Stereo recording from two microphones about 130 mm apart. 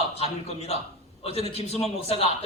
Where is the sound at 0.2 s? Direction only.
55° left (ahead or behind).